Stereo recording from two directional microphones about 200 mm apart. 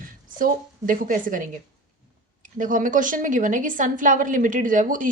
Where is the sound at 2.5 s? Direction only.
40° right (ahead or behind).